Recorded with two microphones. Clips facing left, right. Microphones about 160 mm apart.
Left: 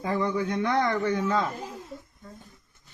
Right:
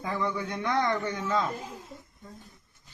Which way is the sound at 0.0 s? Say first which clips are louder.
Left 4 dB; 25° left (ahead or behind).